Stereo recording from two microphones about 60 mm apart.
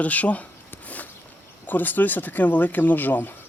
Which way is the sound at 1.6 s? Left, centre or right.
Left.